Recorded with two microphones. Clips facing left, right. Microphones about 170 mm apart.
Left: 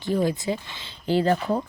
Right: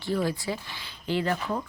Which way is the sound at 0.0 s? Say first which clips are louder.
Left 4 dB; 20° left (ahead or behind).